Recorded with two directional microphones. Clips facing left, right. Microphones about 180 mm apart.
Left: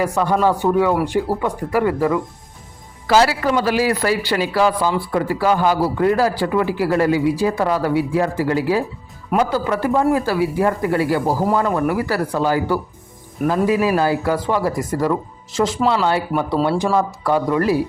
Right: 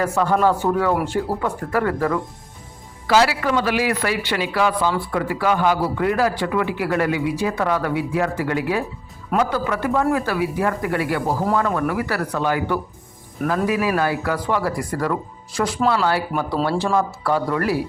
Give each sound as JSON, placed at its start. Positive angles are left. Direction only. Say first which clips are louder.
{"t": 0.0, "sound": "speech", "louder": "left 1 dB", "side_deg": 10}
{"t": 3.1, "sound": "speech", "louder": "left 2 dB", "side_deg": 40}